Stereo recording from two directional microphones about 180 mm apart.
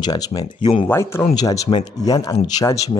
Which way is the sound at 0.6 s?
40° left (ahead or behind).